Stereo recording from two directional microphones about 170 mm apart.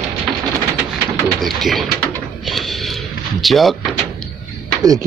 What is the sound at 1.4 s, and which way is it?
Speech, centre (ahead or behind).